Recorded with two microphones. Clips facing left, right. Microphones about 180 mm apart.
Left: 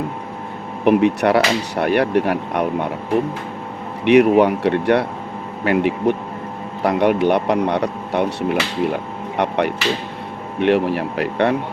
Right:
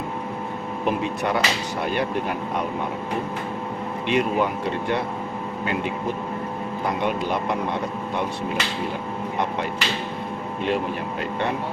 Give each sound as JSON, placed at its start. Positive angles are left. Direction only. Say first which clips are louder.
{"t": 0.9, "sound": "speech", "louder": "left 10 dB", "side_deg": 70}
{"t": 4.0, "sound": "speech", "louder": "left 10 dB", "side_deg": 70}